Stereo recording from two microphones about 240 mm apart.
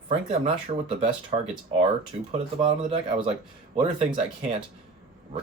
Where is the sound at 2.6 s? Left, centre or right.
Right.